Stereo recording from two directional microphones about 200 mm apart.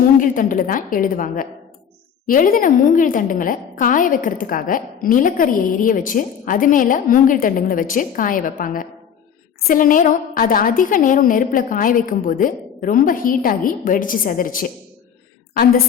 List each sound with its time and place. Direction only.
0.0 s a woman's voice: 40° left (ahead or behind)